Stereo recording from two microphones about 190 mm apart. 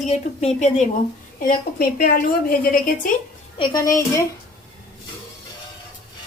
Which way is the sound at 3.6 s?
20° left (ahead or behind).